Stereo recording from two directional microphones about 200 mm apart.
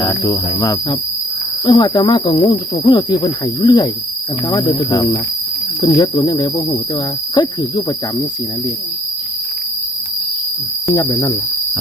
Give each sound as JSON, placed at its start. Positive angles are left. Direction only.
{"t": 0.0, "sound": "speech", "side_deg": 25}
{"t": 10.9, "sound": "speech", "side_deg": 20}